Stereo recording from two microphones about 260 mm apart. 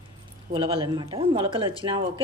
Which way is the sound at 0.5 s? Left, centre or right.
Centre.